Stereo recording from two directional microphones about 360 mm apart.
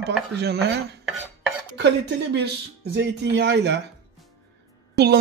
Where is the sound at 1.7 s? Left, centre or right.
Right.